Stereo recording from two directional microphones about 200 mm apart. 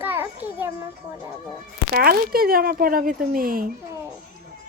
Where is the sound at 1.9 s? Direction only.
50° right (ahead or behind).